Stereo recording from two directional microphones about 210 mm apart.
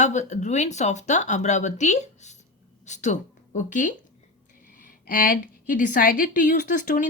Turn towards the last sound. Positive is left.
turn(degrees=40)  # may be behind; listen again after turning